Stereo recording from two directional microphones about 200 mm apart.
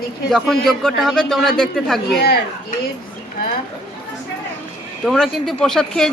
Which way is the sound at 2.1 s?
50° left (ahead or behind).